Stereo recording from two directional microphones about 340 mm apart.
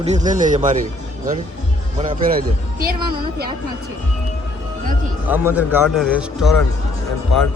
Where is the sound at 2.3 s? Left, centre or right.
Right.